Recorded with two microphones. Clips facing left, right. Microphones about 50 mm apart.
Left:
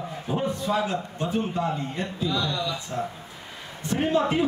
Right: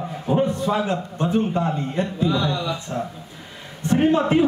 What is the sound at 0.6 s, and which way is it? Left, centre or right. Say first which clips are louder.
A man's voice: right 3 dB; right.